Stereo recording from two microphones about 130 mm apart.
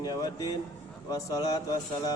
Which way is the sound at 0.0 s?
30° left (ahead or behind).